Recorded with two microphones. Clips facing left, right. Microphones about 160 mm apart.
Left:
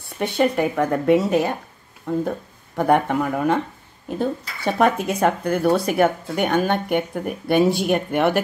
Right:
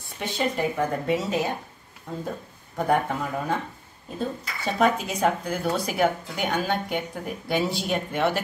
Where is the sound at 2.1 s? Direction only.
75° left (ahead or behind).